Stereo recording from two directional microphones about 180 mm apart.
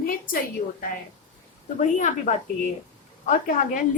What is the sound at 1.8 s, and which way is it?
A woman's voice, 45° left (ahead or behind).